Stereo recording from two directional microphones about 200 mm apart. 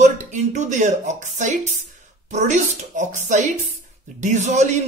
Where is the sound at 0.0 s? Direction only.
35° right (ahead or behind).